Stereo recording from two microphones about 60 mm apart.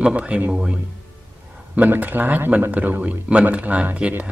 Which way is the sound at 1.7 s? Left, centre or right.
Right.